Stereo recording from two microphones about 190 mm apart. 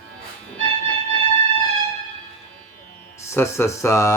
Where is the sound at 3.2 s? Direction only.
15° left (ahead or behind).